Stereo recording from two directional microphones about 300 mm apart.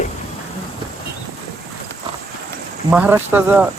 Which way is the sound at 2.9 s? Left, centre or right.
Centre.